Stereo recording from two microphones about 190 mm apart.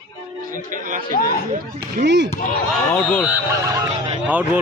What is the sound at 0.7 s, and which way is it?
Speech, 45° right (ahead or behind).